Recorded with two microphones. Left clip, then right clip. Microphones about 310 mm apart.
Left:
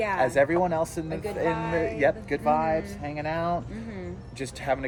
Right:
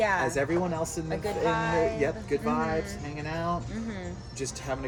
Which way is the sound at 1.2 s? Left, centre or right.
Centre.